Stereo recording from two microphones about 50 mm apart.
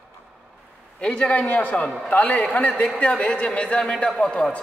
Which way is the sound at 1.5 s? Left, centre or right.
Left.